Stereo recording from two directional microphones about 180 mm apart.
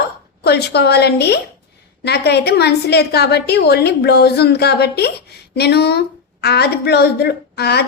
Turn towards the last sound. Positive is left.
turn(degrees=65)  # may be behind; listen again after turning